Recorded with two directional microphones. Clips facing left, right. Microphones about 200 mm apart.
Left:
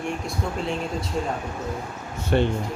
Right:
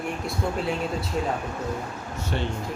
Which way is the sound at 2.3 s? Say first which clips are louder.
Left 9 dB; 60° left (ahead or behind).